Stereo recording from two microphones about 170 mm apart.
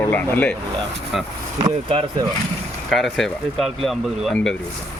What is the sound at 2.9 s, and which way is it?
Speech, centre (ahead or behind).